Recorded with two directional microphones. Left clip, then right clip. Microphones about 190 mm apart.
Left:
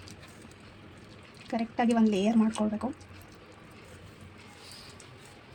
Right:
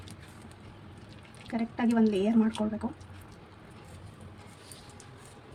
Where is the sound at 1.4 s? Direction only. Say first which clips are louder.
Left 3 dB; 25° left (ahead or behind).